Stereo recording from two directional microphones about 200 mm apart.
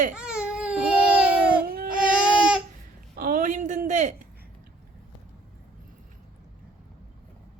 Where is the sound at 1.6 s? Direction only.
50° right (ahead or behind).